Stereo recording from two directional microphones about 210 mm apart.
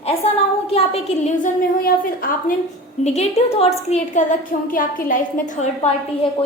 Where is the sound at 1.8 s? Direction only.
40° left (ahead or behind).